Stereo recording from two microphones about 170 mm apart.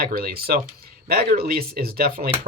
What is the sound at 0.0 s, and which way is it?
Speech, 65° right (ahead or behind).